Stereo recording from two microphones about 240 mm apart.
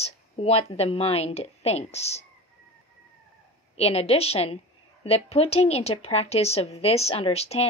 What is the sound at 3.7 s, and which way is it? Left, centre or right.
A woman's voice, left.